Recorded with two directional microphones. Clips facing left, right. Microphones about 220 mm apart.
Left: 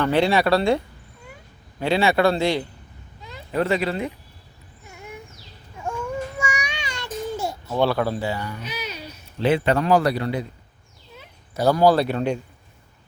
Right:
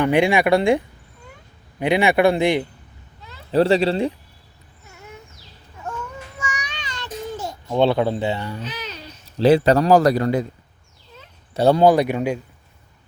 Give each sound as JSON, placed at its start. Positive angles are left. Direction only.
{"t": 0.0, "sound": "speech", "side_deg": -15}
{"t": 3.2, "sound": "a sound", "side_deg": 15}
{"t": 3.5, "sound": "speech", "side_deg": -30}
{"t": 4.9, "sound": "a sound", "side_deg": 15}
{"t": 5.8, "sound": "babbling", "side_deg": 10}
{"t": 7.8, "sound": "speech", "side_deg": -20}
{"t": 8.6, "sound": "a sound", "side_deg": 10}
{"t": 9.4, "sound": "speech", "side_deg": -40}
{"t": 11.5, "sound": "speech", "side_deg": -25}
{"t": 11.9, "sound": "speech", "side_deg": -15}